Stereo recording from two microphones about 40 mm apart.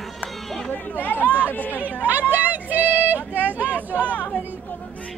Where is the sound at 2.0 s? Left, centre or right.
Right.